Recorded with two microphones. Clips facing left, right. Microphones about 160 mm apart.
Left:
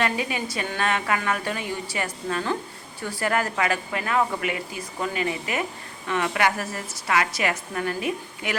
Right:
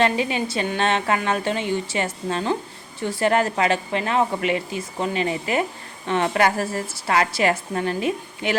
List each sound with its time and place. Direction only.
0.0 s a woman's voice: 25° right (ahead or behind)